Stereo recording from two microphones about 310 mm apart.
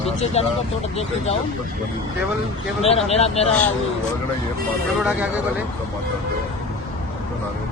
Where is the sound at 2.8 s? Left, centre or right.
Centre.